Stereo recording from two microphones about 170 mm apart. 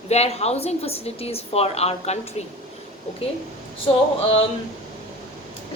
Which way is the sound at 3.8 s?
40° left (ahead or behind).